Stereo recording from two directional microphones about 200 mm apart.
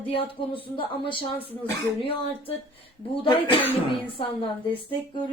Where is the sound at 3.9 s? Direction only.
25° left (ahead or behind).